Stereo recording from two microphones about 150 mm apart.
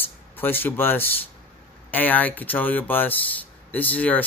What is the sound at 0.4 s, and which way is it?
Speech, 15° left (ahead or behind).